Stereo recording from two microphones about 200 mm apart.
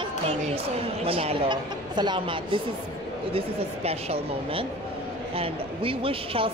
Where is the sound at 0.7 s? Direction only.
30° right (ahead or behind).